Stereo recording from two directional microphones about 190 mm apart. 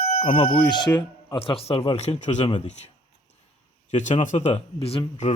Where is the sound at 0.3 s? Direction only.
30° left (ahead or behind).